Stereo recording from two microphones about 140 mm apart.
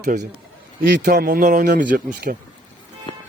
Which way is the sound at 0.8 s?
80° right.